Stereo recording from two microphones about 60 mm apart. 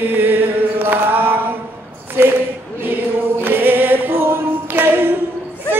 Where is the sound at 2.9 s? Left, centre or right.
Right.